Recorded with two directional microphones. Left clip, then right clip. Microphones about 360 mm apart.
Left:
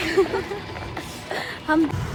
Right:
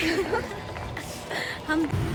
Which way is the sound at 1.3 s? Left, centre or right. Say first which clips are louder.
Left 5 dB; centre.